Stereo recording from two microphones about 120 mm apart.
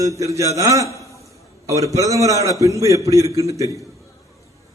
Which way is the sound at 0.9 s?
25° left (ahead or behind).